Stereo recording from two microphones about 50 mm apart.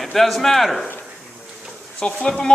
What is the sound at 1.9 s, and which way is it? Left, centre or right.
Speech, centre.